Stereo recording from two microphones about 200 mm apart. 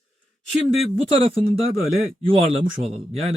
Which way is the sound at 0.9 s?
25° right (ahead or behind).